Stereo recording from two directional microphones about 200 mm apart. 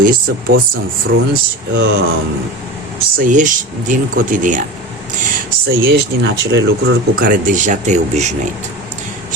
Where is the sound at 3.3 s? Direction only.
40° right (ahead or behind).